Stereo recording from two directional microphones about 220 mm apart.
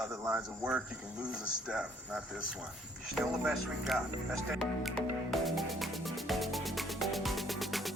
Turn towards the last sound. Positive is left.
turn(degrees=0)  # may be behind; listen again after turning